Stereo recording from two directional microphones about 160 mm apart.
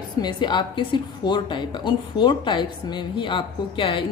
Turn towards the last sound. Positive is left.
turn(degrees=30)  # may be behind; listen again after turning